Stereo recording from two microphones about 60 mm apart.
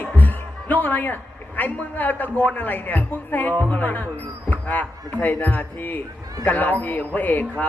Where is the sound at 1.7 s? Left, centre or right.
Left.